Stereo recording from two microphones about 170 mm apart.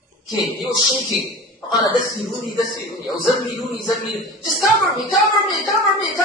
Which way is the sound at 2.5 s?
20° left (ahead or behind).